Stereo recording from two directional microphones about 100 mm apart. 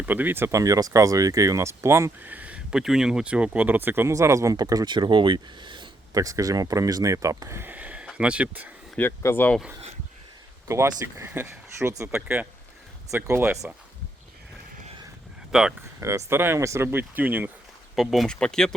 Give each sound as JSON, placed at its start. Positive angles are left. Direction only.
{"t": 0.0, "sound": "speech", "side_deg": -20}
{"t": 0.6, "sound": "speech", "side_deg": -35}
{"t": 2.2, "sound": "speech", "side_deg": -15}
{"t": 4.1, "sound": "speech", "side_deg": -30}
{"t": 6.1, "sound": "speech", "side_deg": -35}
{"t": 9.0, "sound": "speech", "side_deg": 25}
{"t": 11.0, "sound": "speech", "side_deg": -25}
{"t": 12.1, "sound": "speech", "side_deg": -10}
{"t": 13.2, "sound": "speech", "side_deg": -25}
{"t": 15.5, "sound": "speech", "side_deg": -5}
{"t": 16.0, "sound": "speech", "side_deg": -30}
{"t": 17.9, "sound": "speech", "side_deg": 0}